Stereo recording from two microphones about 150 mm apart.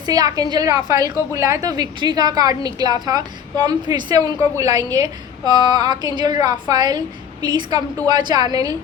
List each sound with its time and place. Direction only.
0.0 s a woman's voice: 25° right (ahead or behind)